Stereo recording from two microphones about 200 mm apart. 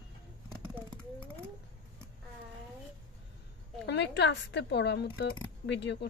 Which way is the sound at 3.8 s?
60° left (ahead or behind).